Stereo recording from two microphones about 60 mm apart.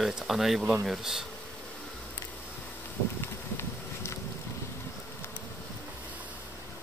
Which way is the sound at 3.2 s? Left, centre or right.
Left.